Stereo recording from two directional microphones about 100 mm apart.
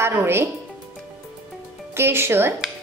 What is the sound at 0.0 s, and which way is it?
Speech, 25° right (ahead or behind).